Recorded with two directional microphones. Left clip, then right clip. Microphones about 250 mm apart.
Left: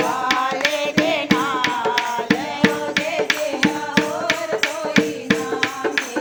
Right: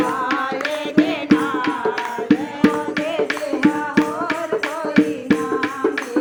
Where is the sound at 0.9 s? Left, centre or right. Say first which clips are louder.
Right 1 dB; left.